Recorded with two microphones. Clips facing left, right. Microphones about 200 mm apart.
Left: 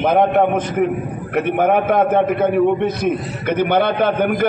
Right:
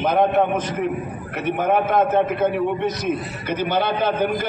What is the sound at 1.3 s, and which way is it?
Speech, 60° left (ahead or behind).